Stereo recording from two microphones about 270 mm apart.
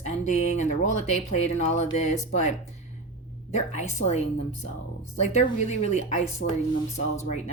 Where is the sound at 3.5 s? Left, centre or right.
Left.